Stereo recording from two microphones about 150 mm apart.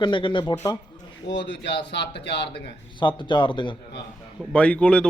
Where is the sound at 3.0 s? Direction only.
30° left (ahead or behind).